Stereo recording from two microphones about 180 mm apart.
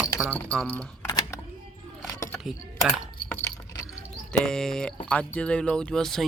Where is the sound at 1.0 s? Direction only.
20° left (ahead or behind).